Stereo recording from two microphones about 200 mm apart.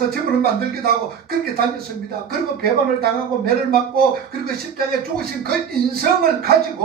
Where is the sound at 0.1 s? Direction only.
50° right (ahead or behind).